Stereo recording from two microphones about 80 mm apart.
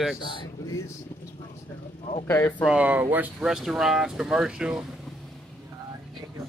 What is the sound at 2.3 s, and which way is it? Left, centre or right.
Speech, left.